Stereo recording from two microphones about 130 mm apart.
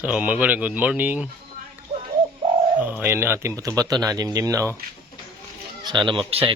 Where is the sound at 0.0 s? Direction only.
10° right (ahead or behind).